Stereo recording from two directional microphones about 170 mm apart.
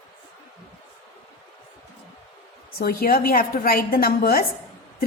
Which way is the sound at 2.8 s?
55° left (ahead or behind).